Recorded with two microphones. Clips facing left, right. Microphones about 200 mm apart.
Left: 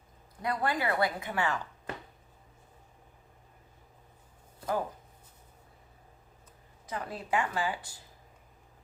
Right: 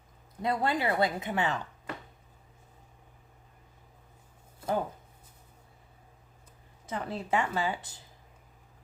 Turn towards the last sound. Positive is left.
turn(degrees=-20)  # may be behind; listen again after turning